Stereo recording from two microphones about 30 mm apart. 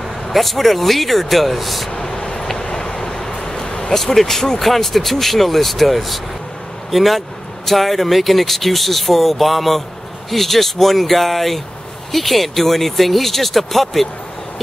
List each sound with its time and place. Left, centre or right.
0.3 s speech: centre
2.5 s vehicle: centre
3.4 s a sound: left
3.9 s speech: centre